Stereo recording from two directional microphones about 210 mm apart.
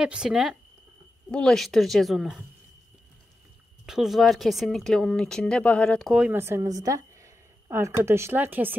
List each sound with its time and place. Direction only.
0.0 s speech: 5° right (ahead or behind)
3.8 s speech: centre (ahead or behind)